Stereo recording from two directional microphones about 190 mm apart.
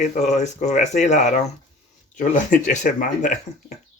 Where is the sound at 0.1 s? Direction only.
40° left (ahead or behind).